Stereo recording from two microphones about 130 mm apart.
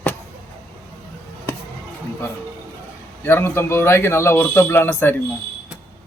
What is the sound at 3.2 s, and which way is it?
Speech, 15° left (ahead or behind).